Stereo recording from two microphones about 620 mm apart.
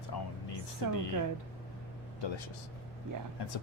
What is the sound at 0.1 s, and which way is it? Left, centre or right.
Music, left.